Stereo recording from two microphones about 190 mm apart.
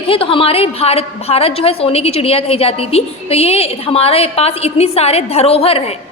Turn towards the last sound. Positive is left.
turn(degrees=30)  # may be behind; listen again after turning